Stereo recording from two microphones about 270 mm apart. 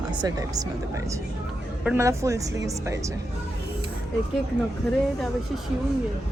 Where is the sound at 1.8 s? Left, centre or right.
Centre.